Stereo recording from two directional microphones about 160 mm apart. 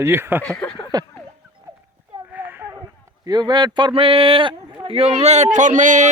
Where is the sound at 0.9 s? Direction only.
25° right (ahead or behind).